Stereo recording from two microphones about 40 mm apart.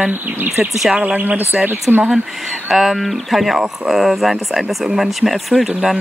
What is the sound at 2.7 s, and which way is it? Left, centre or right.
Speech, centre.